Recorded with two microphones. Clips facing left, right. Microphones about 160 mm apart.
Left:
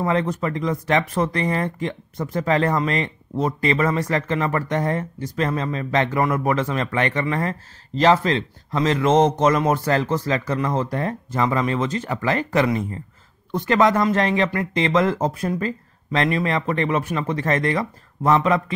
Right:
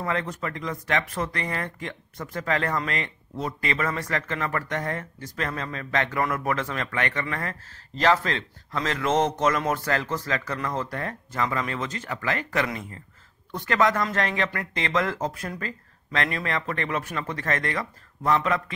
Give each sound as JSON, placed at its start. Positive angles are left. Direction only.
{"t": 0.0, "sound": "speech", "side_deg": 25}